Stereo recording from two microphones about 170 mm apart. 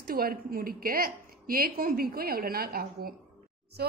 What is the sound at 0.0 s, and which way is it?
A woman's voice, 60° right (ahead or behind).